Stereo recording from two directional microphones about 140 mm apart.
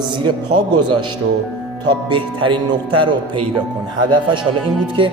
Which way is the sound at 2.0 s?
35° right (ahead or behind).